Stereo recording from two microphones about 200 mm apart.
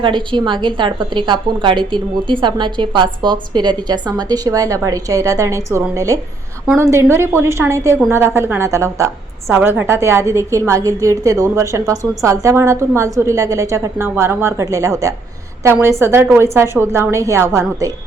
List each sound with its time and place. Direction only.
0.0 s a woman's voice: 25° right (ahead or behind)